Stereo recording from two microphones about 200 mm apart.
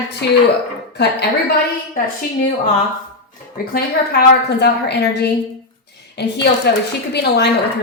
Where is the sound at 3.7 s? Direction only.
55° left (ahead or behind).